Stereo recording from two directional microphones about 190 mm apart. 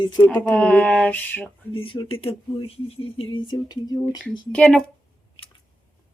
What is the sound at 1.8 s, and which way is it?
Speech, 30° left (ahead or behind).